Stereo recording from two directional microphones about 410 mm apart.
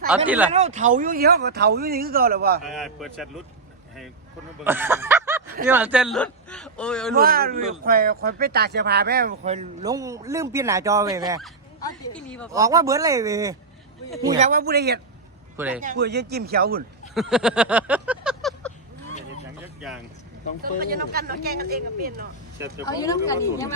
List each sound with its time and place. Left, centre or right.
0.3 s speech: centre
0.5 s speech: centre
2.6 s speech: centre
4.6 s speech: centre
7.2 s speech: right; by 12.5 s centre
12.5 s speech: centre; by 15.0 s right
15.5 s speech: centre
15.8 s speech: right
17.2 s a sound: centre
20.6 s speech: right
22.9 s speech: centre